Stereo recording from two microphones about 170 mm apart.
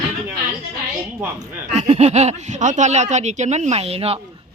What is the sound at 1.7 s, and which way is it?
Speech, 40° right (ahead or behind).